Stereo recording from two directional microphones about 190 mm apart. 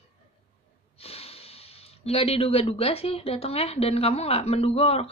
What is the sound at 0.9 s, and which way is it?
Speech, 30° left (ahead or behind).